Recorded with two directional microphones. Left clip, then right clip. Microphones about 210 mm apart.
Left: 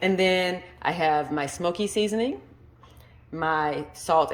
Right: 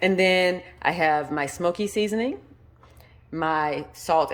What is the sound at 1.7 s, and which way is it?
Speech, 50° right (ahead or behind).